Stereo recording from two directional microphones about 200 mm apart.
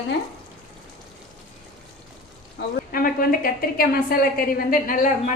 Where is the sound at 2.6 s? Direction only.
45° left (ahead or behind).